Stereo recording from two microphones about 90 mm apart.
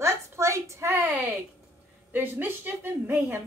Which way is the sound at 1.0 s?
10° right (ahead or behind).